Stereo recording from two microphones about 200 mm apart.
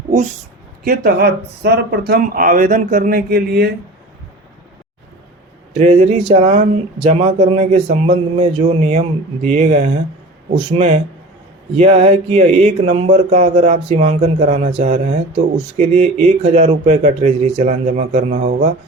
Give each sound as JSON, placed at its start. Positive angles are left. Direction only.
{"t": 0.9, "sound": "speech", "side_deg": -50}
{"t": 5.7, "sound": "speech", "side_deg": -30}